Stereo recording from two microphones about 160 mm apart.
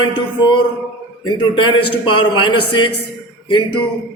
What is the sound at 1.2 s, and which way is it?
A man's voice, 30° left (ahead or behind).